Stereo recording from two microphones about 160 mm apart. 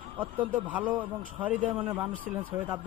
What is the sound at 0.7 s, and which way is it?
A man's voice, 10° right (ahead or behind).